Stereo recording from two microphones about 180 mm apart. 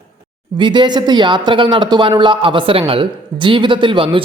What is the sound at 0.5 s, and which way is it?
Speech, 25° right (ahead or behind).